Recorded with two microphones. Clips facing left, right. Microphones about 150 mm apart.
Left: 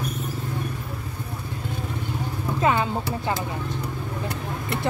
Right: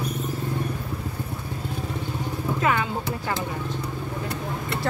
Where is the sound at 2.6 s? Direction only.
25° left (ahead or behind).